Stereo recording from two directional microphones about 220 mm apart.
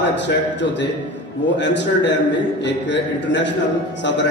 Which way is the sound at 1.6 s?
55° left (ahead or behind).